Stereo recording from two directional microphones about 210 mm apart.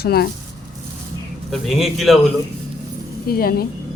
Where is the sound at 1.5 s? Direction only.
Centre (ahead or behind).